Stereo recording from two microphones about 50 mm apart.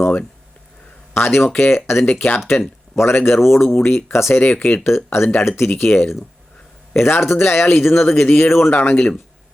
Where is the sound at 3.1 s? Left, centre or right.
Left.